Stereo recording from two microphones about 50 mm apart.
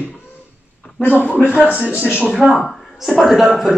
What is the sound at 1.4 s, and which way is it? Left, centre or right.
Speech, right.